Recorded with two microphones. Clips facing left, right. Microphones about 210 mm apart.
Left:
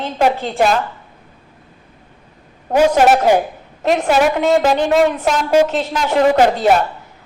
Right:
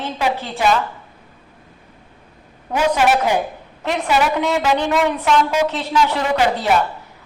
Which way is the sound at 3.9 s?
45° left (ahead or behind).